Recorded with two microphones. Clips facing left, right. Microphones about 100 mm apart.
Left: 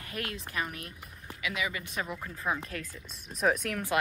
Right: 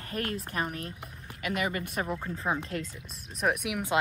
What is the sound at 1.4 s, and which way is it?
Speech, 50° right (ahead or behind).